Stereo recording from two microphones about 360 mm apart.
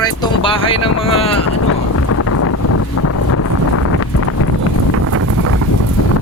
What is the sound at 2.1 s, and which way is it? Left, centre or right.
Wind noise, left.